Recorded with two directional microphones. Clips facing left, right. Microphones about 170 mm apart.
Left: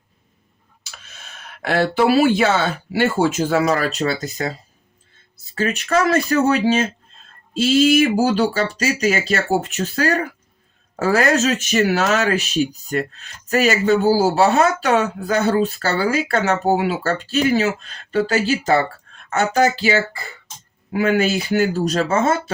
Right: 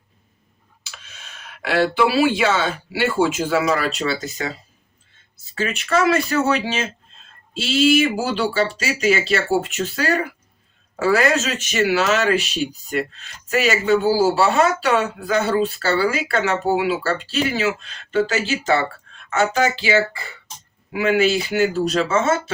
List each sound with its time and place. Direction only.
0.9 s speech: 45° left (ahead or behind)
5.5 s speech: 40° left (ahead or behind)